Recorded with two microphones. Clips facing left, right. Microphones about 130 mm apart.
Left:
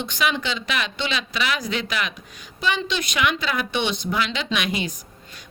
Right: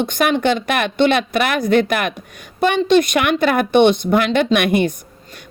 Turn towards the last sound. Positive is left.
turn(degrees=-55)  # may be behind; listen again after turning